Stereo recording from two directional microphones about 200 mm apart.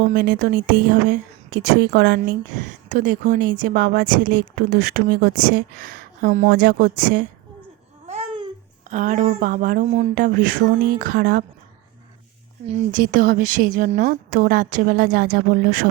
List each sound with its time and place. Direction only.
0.1 s a woman's voice: 45° right (ahead or behind)
8.0 s babbling: 30° right (ahead or behind)
8.9 s a woman's voice: 40° right (ahead or behind)
12.9 s a woman's voice: 45° right (ahead or behind)